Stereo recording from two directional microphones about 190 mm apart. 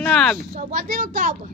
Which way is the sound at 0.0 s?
5° left (ahead or behind).